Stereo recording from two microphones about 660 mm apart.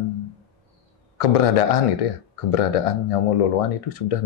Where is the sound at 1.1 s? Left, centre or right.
Left.